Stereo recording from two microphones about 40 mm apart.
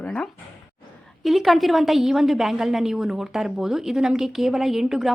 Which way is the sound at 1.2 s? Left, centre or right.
Centre.